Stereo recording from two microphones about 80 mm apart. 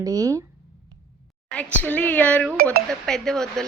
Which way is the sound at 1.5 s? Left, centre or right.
Centre.